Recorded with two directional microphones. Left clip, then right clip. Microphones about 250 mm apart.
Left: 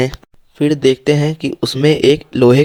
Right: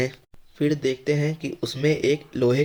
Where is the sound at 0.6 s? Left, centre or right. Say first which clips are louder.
Left 11 dB; left.